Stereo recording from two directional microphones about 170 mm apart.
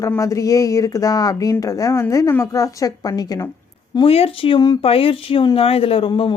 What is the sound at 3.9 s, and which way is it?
Speech, 35° left (ahead or behind).